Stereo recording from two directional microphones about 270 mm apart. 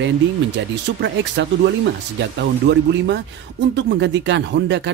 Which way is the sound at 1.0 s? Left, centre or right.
Right.